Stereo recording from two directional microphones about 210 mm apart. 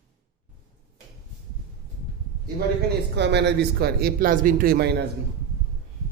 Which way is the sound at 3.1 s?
55° right (ahead or behind).